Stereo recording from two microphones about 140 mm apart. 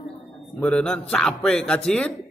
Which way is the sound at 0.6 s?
10° left (ahead or behind).